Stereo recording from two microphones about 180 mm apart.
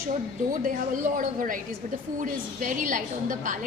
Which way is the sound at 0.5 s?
50° right (ahead or behind).